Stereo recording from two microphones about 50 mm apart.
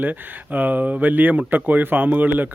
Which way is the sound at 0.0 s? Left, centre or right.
Right.